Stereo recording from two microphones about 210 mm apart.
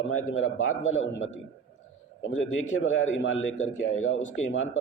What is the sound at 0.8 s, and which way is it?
A man's voice, 70° left (ahead or behind).